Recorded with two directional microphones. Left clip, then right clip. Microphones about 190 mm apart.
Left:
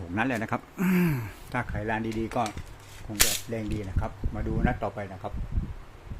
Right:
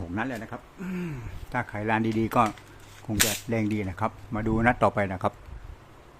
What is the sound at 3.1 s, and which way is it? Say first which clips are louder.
Speech: even; 50° right (ahead or behind).